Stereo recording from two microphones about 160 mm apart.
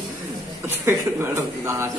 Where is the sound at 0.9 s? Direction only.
15° right (ahead or behind).